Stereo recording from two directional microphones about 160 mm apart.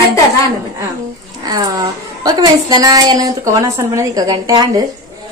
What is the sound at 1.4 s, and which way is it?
A woman's voice, 25° right (ahead or behind).